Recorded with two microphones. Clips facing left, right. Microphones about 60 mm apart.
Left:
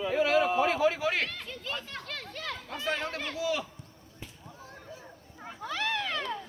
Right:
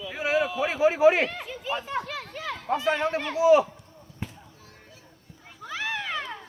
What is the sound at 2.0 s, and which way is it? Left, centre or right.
Children playing, centre.